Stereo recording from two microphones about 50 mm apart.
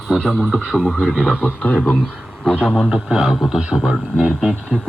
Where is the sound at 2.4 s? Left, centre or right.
Centre.